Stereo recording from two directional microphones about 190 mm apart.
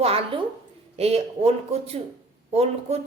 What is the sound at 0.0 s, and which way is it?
A woman's voice, 30° right (ahead or behind).